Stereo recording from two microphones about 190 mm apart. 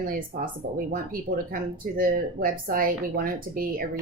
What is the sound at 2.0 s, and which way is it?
A woman's voice, 45° right (ahead or behind).